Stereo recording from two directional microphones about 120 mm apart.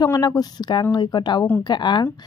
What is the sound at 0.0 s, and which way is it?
Speech, 30° left (ahead or behind).